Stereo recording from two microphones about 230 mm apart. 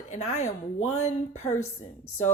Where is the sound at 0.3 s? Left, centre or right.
Left.